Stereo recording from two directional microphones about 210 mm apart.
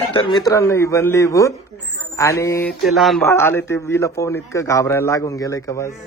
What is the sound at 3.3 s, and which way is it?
A man's voice, 10° left (ahead or behind).